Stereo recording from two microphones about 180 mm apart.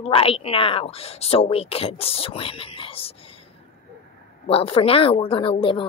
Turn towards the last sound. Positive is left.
turn(degrees=30)  # may be behind; listen again after turning